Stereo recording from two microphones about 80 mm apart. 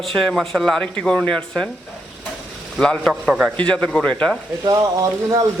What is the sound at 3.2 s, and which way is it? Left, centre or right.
Speech, centre.